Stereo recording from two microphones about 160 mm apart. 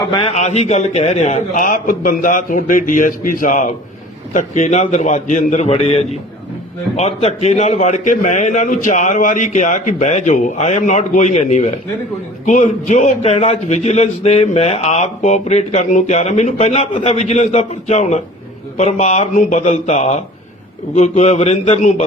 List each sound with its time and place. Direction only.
0.3 s a man's voice: 45° left (ahead or behind)